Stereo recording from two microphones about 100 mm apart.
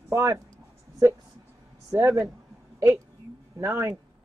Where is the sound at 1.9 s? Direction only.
30° right (ahead or behind).